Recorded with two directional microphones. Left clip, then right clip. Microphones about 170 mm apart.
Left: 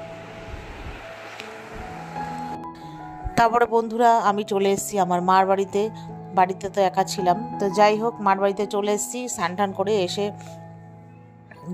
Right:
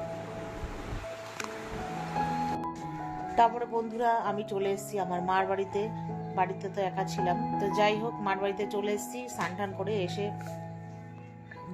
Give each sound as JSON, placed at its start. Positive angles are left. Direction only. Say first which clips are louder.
{"t": 2.1, "sound": "music", "louder": "even", "side_deg": 0}
{"t": 3.3, "sound": "speech", "louder": "left 8 dB", "side_deg": 85}